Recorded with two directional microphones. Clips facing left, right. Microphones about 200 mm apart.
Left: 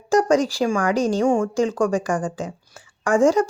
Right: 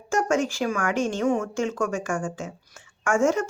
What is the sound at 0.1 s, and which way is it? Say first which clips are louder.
A woman's voice: left 6 dB; 35° left (ahead or behind).